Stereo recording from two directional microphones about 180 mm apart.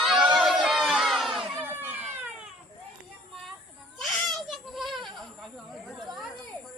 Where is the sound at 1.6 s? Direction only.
10° right (ahead or behind).